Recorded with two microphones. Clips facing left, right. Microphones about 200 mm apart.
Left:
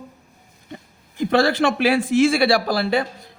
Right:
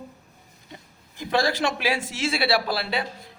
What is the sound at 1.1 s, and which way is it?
A man's voice, 55° left (ahead or behind).